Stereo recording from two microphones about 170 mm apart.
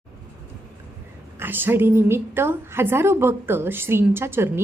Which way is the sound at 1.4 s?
10° right (ahead or behind).